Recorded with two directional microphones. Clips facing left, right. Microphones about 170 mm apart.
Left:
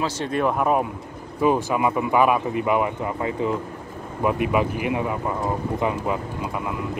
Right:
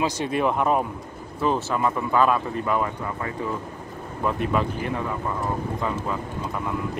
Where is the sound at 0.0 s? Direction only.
15° right (ahead or behind).